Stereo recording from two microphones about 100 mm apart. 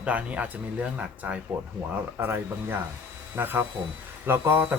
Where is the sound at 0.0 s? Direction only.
15° right (ahead or behind).